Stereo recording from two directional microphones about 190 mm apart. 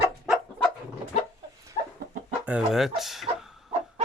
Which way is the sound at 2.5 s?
5° right (ahead or behind).